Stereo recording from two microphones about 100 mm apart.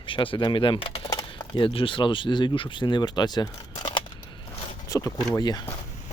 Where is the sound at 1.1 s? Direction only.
50° left (ahead or behind).